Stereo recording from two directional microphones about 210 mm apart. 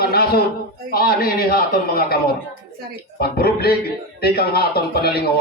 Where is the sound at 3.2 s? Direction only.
50° left (ahead or behind).